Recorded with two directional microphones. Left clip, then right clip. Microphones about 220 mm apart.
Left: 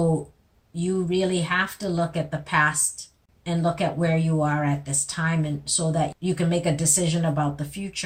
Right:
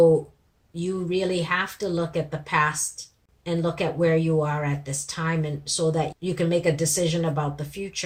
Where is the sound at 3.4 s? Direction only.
30° right (ahead or behind).